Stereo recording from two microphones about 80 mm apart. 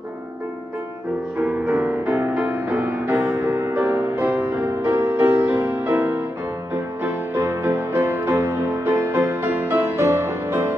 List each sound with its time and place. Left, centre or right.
1.4 s music: centre; by 10.7 s right